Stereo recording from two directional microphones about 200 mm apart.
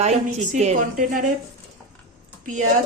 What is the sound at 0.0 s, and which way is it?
A woman's voice, 35° right (ahead or behind).